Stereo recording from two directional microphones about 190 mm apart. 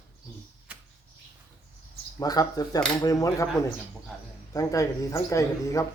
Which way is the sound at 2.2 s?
20° left (ahead or behind).